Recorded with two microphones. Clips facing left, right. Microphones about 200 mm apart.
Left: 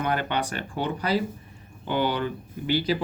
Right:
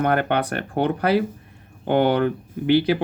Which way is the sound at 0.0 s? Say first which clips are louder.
Right 6 dB; 55° right (ahead or behind).